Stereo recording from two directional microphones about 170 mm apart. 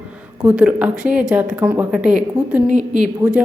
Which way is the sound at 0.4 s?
10° right (ahead or behind).